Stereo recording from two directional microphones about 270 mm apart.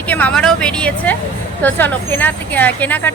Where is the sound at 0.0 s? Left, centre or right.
Centre.